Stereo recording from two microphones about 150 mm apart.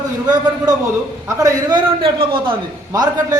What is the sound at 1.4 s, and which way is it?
A man's voice, 30° right (ahead or behind).